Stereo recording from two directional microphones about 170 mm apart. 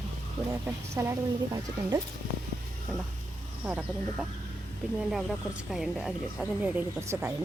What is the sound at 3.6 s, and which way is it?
Speech, 10° right (ahead or behind).